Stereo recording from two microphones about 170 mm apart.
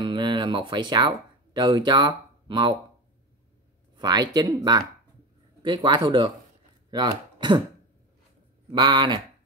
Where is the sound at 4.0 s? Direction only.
25° right (ahead or behind).